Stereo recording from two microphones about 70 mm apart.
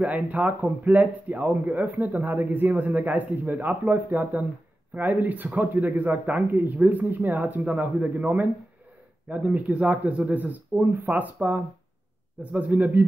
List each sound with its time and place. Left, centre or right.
0.0 s speech: right